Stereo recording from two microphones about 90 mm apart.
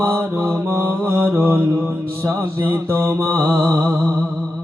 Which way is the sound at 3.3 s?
35° right (ahead or behind).